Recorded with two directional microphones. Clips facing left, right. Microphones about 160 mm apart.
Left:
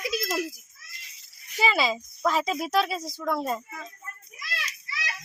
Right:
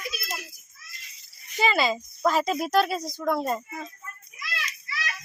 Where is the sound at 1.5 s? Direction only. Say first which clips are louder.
Right 1 dB; centre (ahead or behind).